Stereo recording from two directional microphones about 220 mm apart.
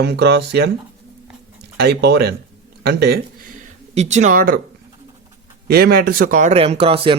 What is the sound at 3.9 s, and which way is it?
Speech, 30° right (ahead or behind).